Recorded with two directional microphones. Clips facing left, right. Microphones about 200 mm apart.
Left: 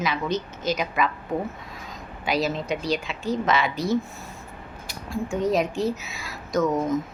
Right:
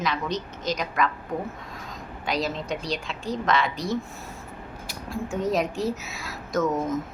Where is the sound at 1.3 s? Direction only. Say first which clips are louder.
Left 3 dB; 25° left (ahead or behind).